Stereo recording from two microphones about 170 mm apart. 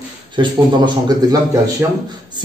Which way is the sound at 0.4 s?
25° right (ahead or behind).